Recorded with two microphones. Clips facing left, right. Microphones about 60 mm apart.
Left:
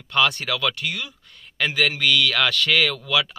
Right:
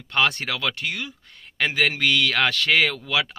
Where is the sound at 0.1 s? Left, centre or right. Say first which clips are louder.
Left 1 dB; right.